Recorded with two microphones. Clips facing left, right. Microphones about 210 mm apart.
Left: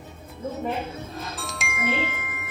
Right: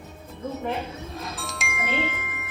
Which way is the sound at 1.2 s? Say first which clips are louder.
Even; centre (ahead or behind).